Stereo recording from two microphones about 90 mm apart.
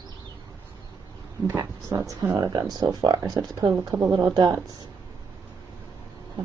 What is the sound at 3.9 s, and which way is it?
Speech, 25° right (ahead or behind).